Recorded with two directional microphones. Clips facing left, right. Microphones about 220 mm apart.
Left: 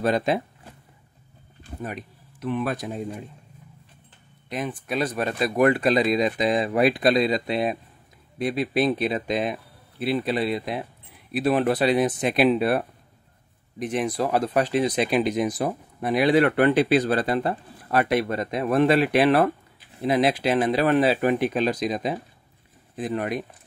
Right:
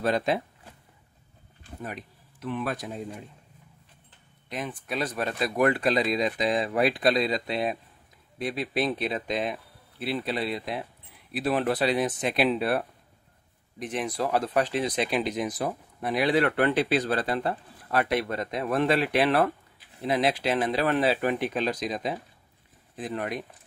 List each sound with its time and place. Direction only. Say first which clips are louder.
0.0 s speech: left 3 dB; 15° left (ahead or behind)
2.4 s speech: left 4 dB; 20° left (ahead or behind)
4.5 s speech: left 4 dB; 15° left (ahead or behind)
13.9 s speech: left 4 dB; 15° left (ahead or behind)